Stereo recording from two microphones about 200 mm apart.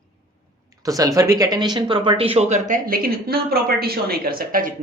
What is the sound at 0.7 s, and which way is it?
Speech, 15° right (ahead or behind).